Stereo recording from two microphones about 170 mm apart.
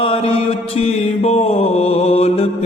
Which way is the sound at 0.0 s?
35° left (ahead or behind).